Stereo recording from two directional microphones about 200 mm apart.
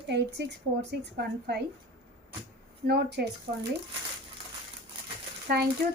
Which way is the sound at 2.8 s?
55° right (ahead or behind).